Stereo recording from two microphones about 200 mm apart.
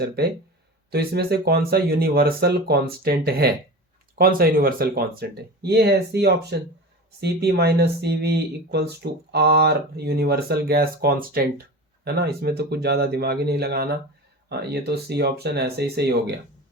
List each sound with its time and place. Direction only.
0.9 s speech: 50° right (ahead or behind)